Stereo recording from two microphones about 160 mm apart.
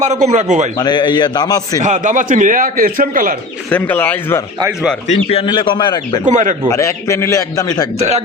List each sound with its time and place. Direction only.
0.0 s a man's voice: 45° right (ahead or behind)
0.8 s a man's voice: 25° left (ahead or behind)
1.8 s a man's voice: 50° right (ahead or behind)
3.7 s speech: 10° left (ahead or behind)
5.0 s a man's voice: 45° left (ahead or behind)
5.5 s a man's voice: 30° left (ahead or behind)
6.2 s a man's voice: 50° right (ahead or behind)
6.7 s a man's voice: 20° left (ahead or behind)
7.9 s a man's voice: 45° right (ahead or behind)